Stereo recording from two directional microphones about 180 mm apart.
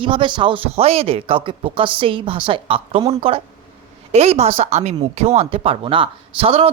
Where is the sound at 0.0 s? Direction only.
30° right (ahead or behind).